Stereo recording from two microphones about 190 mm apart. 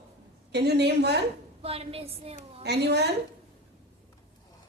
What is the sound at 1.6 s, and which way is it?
A woman's voice, 30° right (ahead or behind).